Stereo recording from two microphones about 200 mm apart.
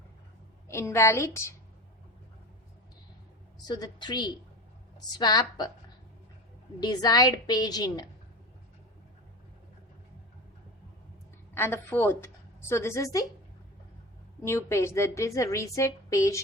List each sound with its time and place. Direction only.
0.7 s a woman's voice: 15° left (ahead or behind)
3.6 s a woman's voice: 20° left (ahead or behind)
6.7 s a woman's voice: 20° left (ahead or behind)
11.5 s a woman's voice: 10° left (ahead or behind)
14.4 s a woman's voice: 15° left (ahead or behind)